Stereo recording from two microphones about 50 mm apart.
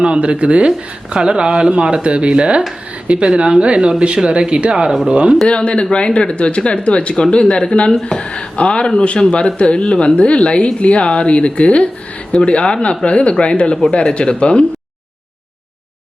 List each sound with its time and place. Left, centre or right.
0.0 s speech: right
5.5 s speech: left